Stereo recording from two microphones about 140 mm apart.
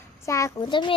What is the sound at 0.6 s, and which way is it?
Speech, 35° left (ahead or behind).